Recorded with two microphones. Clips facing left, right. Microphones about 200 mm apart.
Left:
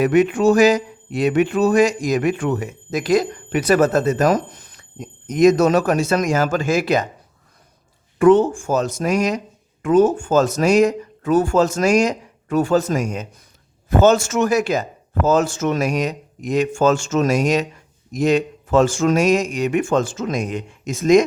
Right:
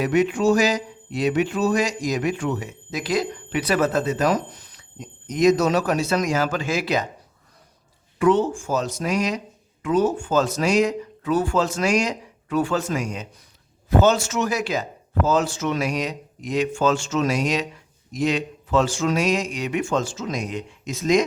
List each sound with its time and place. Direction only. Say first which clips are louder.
0.0 s speech: left 4 dB; 55° left (ahead or behind)
8.2 s speech: left 6 dB; 50° left (ahead or behind)